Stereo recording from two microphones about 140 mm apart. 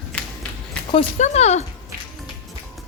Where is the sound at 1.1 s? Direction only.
55° left (ahead or behind).